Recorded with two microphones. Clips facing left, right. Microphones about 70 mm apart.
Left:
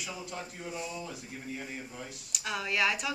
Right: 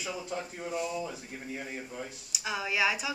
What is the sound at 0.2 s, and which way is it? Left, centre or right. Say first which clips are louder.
Speech: right 4 dB; centre.